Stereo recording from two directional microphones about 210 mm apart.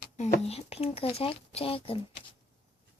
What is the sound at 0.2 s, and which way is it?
Speech, 30° left (ahead or behind).